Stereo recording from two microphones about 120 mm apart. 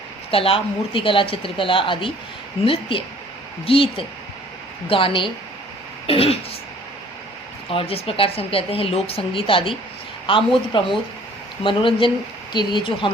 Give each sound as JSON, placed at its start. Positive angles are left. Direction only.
{"t": 0.3, "sound": "speech", "side_deg": 50}
{"t": 7.7, "sound": "speech", "side_deg": 50}